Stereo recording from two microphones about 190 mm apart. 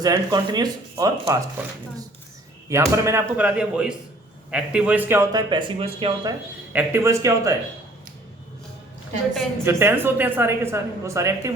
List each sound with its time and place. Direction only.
0.0 s a woman's voice: 20° right (ahead or behind)
6.7 s a woman's voice: 15° right (ahead or behind)
9.6 s a woman's voice: 15° right (ahead or behind)